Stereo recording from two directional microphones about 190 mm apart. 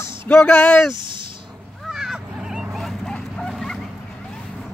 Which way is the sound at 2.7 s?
Centre (ahead or behind).